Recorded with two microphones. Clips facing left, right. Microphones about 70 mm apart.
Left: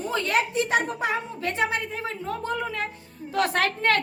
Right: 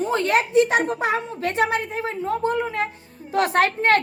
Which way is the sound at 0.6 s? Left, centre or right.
Right.